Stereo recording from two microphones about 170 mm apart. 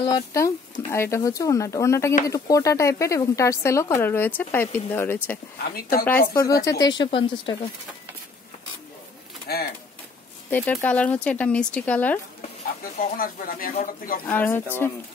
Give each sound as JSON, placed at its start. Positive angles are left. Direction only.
{"t": 0.0, "sound": "speech", "side_deg": 20}
{"t": 5.8, "sound": "speech", "side_deg": 60}
{"t": 6.0, "sound": "speech", "side_deg": 15}
{"t": 9.5, "sound": "speech", "side_deg": 65}
{"t": 10.5, "sound": "speech", "side_deg": 10}
{"t": 13.0, "sound": "speech", "side_deg": 55}
{"t": 14.2, "sound": "speech", "side_deg": 10}